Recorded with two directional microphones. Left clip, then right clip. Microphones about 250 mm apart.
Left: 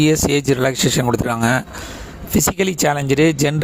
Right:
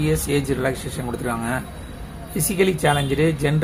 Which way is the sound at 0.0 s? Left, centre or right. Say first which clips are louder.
Left 6 dB; left.